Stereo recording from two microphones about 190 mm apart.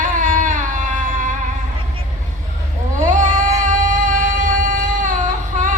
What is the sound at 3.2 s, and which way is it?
Music, 45° right (ahead or behind).